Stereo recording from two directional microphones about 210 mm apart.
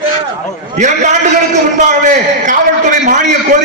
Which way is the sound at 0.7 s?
35° right (ahead or behind).